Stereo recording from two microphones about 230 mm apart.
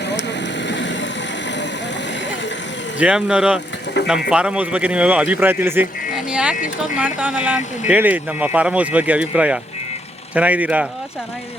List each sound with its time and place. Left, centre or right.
0.0 s vehicle: left
3.0 s a man's voice: centre